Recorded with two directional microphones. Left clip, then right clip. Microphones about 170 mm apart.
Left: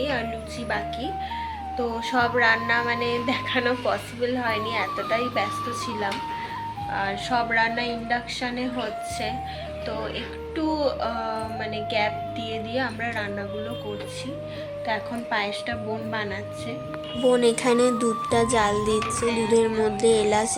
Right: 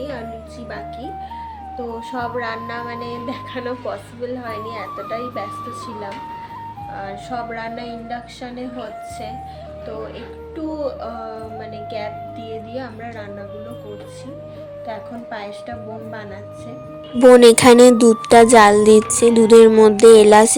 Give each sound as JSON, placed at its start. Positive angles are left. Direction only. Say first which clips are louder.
{"t": 0.0, "sound": "music", "louder": "left 2 dB", "side_deg": -5}
{"t": 1.8, "sound": "music", "louder": "left 3 dB", "side_deg": -5}
{"t": 6.9, "sound": "music", "louder": "left 4 dB", "side_deg": -5}
{"t": 10.6, "sound": "speech", "louder": "left 1 dB", "side_deg": -10}
{"t": 11.9, "sound": "music", "louder": "left 3 dB", "side_deg": -5}
{"t": 14.8, "sound": "music", "louder": "left 3 dB", "side_deg": -5}
{"t": 17.2, "sound": "speech", "louder": "right 13 dB", "side_deg": -55}
{"t": 19.5, "sound": "music", "louder": "right 14 dB", "side_deg": -50}